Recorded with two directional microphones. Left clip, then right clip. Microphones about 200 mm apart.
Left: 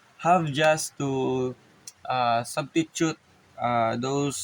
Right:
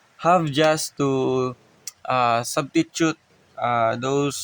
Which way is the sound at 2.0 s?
55° right (ahead or behind).